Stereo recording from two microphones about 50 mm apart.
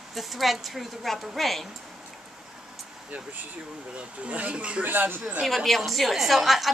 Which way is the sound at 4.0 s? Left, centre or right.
Right.